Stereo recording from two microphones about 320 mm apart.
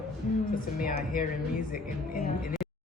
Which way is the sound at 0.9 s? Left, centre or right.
Left.